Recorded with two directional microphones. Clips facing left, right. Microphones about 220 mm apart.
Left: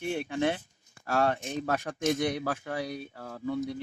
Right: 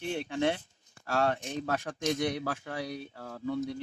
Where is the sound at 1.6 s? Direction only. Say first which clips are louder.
Left 2 dB; 50° left (ahead or behind).